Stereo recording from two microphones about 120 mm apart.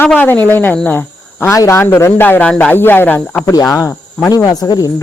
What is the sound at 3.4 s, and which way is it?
Speech, 30° left (ahead or behind).